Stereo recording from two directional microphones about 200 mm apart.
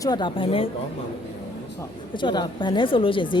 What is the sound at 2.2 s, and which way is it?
A woman's voice, 25° left (ahead or behind).